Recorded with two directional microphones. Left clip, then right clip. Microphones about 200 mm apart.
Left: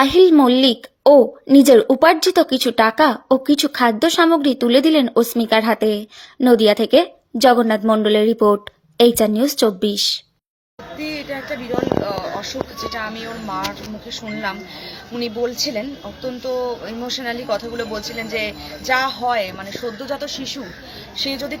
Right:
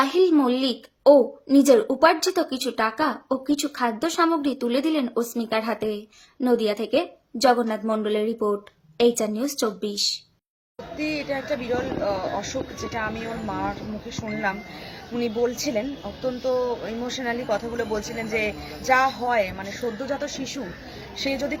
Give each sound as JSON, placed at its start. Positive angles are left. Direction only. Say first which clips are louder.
{"t": 0.0, "sound": "speech", "louder": "left 8 dB", "side_deg": 40}
{"t": 10.9, "sound": "speech", "louder": "left 1 dB", "side_deg": 0}